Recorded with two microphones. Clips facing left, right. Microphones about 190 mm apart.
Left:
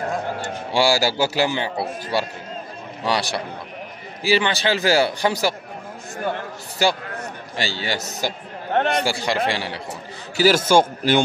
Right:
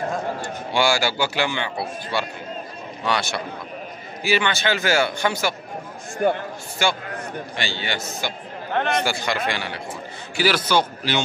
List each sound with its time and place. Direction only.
0.7 s a man's voice: 35° left (ahead or behind)
6.8 s a man's voice: 35° left (ahead or behind)
10.3 s a man's voice: 45° left (ahead or behind)